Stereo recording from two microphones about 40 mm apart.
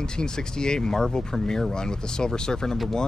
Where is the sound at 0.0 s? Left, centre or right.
Centre.